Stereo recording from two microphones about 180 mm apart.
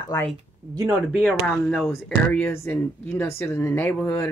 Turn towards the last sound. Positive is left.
turn(degrees=15)  # may be behind; listen again after turning